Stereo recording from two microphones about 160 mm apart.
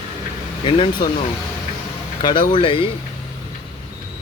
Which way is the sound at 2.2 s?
30° left (ahead or behind).